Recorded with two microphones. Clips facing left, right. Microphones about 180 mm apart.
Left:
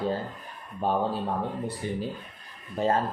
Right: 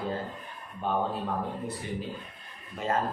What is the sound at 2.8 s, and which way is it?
Speech, 35° left (ahead or behind).